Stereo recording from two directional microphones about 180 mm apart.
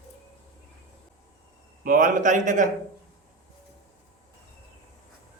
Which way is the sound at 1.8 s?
50° right (ahead or behind).